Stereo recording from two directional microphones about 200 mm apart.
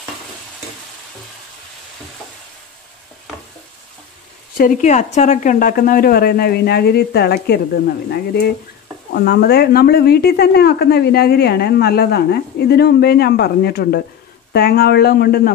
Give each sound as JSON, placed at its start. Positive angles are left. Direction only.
{"t": 4.6, "sound": "speech", "side_deg": 40}